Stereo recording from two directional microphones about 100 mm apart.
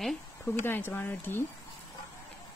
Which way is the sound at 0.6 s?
20° left (ahead or behind).